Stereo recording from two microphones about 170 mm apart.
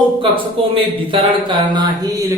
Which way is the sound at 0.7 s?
30° right (ahead or behind).